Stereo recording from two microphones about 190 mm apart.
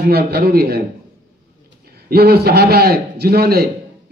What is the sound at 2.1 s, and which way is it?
A man's voice, 55° right (ahead or behind).